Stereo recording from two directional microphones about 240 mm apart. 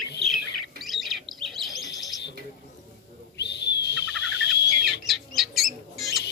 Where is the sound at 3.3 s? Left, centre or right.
Left.